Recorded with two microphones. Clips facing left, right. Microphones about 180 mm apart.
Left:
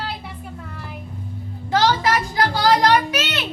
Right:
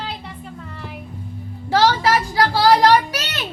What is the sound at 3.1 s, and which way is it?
Child singing, 40° right (ahead or behind).